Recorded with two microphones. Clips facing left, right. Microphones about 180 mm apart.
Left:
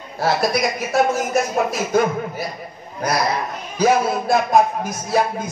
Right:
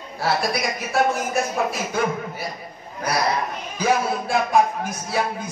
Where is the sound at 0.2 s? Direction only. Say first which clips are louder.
Left 4 dB; 40° left (ahead or behind).